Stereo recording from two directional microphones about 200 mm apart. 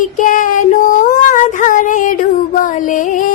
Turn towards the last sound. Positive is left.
turn(degrees=40)  # may be behind; listen again after turning